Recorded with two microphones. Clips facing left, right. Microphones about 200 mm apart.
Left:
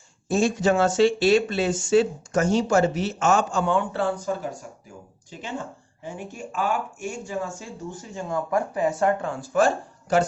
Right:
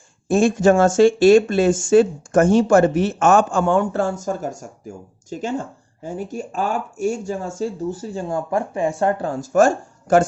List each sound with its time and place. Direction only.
0.3 s speech: 55° right (ahead or behind)